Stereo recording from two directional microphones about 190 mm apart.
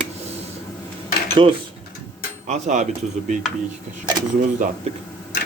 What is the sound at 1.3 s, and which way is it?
Speech, 25° right (ahead or behind).